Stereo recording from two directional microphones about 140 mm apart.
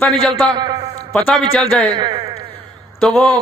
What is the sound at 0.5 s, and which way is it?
Speech, 30° right (ahead or behind).